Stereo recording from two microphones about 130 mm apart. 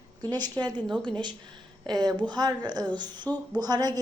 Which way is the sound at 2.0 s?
35° right (ahead or behind).